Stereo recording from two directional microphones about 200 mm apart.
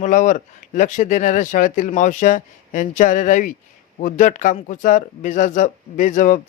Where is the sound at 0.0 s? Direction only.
40° left (ahead or behind).